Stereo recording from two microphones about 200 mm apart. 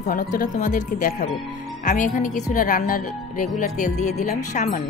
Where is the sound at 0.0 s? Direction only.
40° left (ahead or behind).